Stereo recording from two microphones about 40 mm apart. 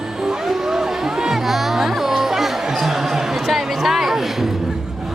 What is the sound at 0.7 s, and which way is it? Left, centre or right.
Music, centre.